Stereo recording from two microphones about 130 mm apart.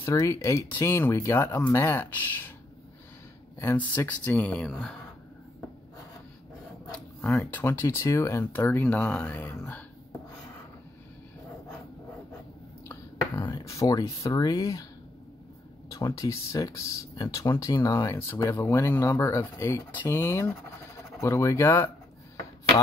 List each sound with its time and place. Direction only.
0.0 s speech: 20° left (ahead or behind)
3.5 s speech: 15° left (ahead or behind)
7.2 s speech: 15° left (ahead or behind)
13.4 s speech: 30° left (ahead or behind)
15.9 s speech: 25° left (ahead or behind)